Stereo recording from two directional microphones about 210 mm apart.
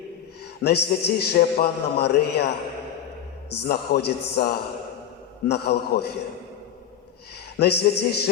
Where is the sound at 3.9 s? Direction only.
50° left (ahead or behind).